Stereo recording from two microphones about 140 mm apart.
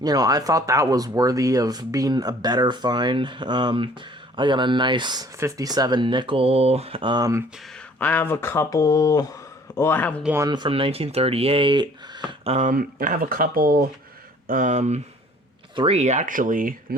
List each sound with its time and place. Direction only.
0.0 s speech: 25° right (ahead or behind)
7.9 s speech: 10° left (ahead or behind)
10.3 s speech: 30° right (ahead or behind)
12.5 s speech: 60° right (ahead or behind); by 13.8 s 90° right
14.4 s speech: 70° right (ahead or behind); by 15.0 s 55° right (ahead or behind)
15.7 s speech: 35° right (ahead or behind)
16.0 s speech: 55° right (ahead or behind); by 16.7 s 75° right (ahead or behind)